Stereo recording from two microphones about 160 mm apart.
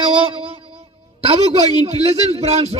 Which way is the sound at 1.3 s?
40° right (ahead or behind).